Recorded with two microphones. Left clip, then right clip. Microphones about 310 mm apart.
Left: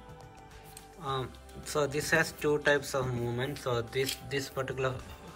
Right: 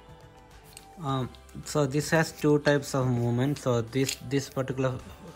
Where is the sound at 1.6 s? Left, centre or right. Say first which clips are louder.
Right 2 dB; right.